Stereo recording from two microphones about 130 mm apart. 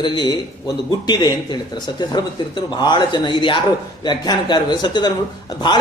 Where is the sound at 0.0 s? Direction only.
35° left (ahead or behind).